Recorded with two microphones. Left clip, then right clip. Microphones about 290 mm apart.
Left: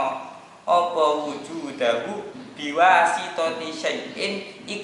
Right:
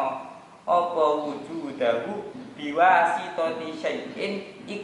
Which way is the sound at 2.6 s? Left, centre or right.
Centre.